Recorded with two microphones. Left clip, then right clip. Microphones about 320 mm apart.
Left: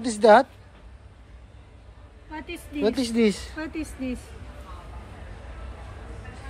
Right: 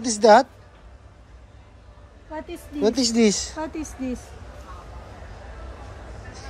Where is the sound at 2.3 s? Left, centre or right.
Centre.